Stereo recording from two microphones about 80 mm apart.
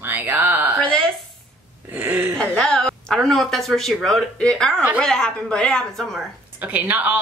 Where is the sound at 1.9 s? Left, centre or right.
Right.